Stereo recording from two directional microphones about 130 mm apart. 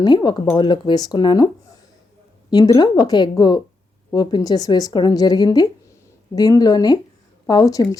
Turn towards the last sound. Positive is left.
turn(degrees=25)  # may be behind; listen again after turning